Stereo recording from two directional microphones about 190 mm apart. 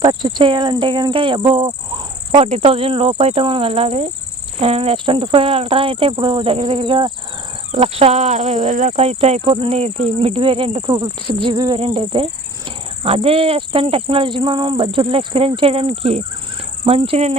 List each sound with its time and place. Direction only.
0.0 s speech: 25° right (ahead or behind)